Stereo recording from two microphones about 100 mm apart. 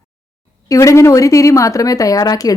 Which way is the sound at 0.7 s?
30° left (ahead or behind).